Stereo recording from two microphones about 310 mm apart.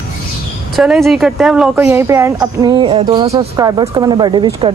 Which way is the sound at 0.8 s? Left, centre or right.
Centre.